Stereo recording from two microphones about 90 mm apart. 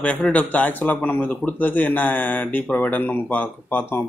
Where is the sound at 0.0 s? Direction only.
15° left (ahead or behind).